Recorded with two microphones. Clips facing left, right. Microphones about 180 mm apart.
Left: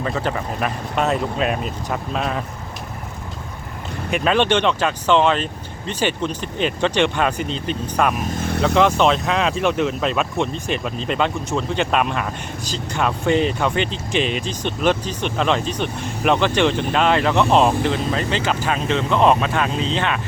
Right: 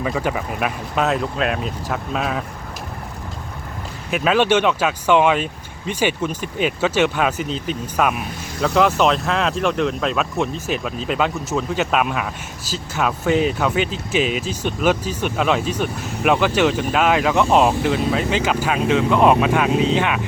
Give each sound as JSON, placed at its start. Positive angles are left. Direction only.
{"t": 0.0, "sound": "speech", "side_deg": -10}
{"t": 4.1, "sound": "speech", "side_deg": -5}
{"t": 8.1, "sound": "vehicle", "side_deg": 45}
{"t": 8.6, "sound": "speech", "side_deg": -5}